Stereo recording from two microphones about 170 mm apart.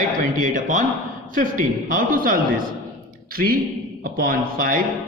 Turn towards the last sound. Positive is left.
turn(degrees=-55)  # may be behind; listen again after turning